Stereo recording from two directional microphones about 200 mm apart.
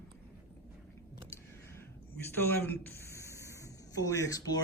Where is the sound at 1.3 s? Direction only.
10° left (ahead or behind).